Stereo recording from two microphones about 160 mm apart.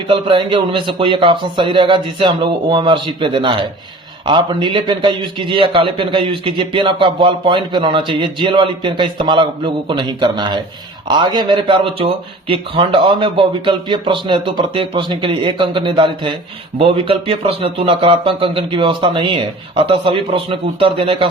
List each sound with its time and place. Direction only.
0.1 s a man's voice: 35° right (ahead or behind)